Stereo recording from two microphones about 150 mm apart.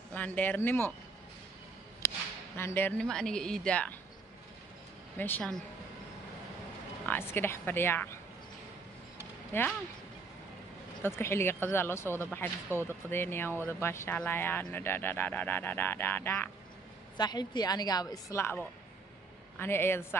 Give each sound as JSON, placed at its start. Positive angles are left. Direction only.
{"t": 0.1, "sound": "speech", "side_deg": 10}
{"t": 2.0, "sound": "speech", "side_deg": 15}
{"t": 5.1, "sound": "speech", "side_deg": 15}
{"t": 7.1, "sound": "speech", "side_deg": 15}
{"t": 9.5, "sound": "speech", "side_deg": 15}
{"t": 11.0, "sound": "speech", "side_deg": 15}
{"t": 17.2, "sound": "a woman's voice", "side_deg": 25}
{"t": 19.6, "sound": "speech", "side_deg": 15}